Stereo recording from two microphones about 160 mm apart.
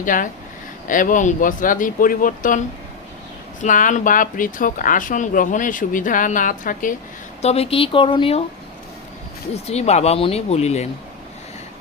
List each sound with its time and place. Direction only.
0.0 s speech: 55° left (ahead or behind)
7.4 s speech: 40° left (ahead or behind)
9.6 s speech: 40° left (ahead or behind)